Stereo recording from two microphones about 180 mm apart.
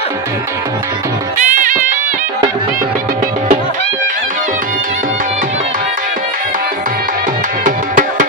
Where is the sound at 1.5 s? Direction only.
45° right (ahead or behind).